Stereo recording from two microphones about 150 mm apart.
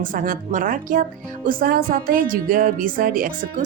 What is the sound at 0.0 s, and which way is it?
Speech, 65° right (ahead or behind).